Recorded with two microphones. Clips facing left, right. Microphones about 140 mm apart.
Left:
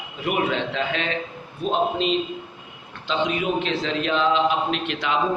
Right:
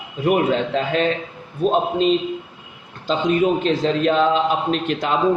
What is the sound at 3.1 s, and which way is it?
A man's voice, 40° right (ahead or behind).